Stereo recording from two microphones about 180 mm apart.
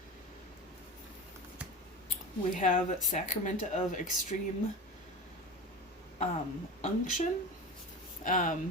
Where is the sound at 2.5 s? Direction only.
45° left (ahead or behind).